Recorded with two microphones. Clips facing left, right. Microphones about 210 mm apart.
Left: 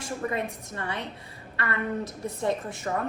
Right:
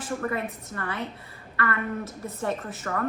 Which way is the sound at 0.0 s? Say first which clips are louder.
Right 1 dB; 20° left (ahead or behind).